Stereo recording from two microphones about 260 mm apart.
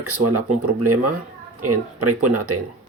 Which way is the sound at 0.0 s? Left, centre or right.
Right.